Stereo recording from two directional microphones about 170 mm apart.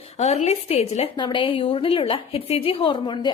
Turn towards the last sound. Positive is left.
turn(degrees=25)  # may be behind; listen again after turning